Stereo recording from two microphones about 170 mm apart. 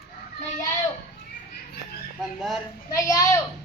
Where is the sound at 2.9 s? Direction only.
20° left (ahead or behind).